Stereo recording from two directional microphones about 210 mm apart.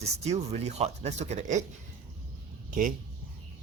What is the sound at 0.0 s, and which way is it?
Speech, 30° right (ahead or behind).